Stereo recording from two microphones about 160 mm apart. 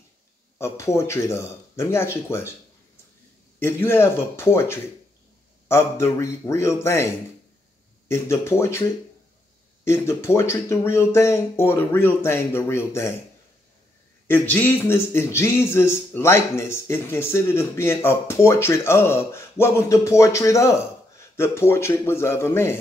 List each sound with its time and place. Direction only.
0.6 s a man's voice: 15° left (ahead or behind)
3.5 s a man's voice: 15° left (ahead or behind)
8.1 s a man's voice: 15° left (ahead or behind)
14.2 s a man's voice: 10° left (ahead or behind)